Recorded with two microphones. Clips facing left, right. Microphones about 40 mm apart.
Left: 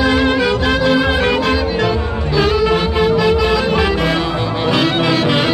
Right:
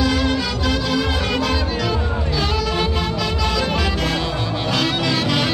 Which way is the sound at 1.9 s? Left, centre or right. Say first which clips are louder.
Left 4 dB; centre.